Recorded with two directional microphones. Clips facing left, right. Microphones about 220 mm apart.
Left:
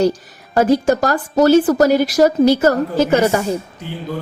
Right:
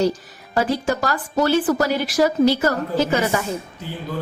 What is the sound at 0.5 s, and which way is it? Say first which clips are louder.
A woman's voice: left 7 dB; 45° left (ahead or behind).